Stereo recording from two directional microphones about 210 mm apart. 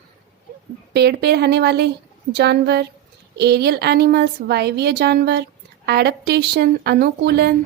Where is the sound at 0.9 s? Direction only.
50° right (ahead or behind).